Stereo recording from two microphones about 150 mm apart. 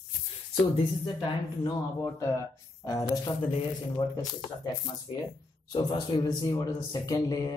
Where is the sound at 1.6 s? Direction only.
20° left (ahead or behind).